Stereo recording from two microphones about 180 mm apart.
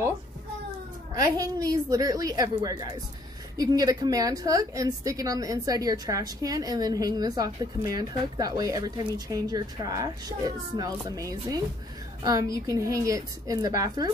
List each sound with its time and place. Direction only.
1.4 s a woman's voice: 20° right (ahead or behind)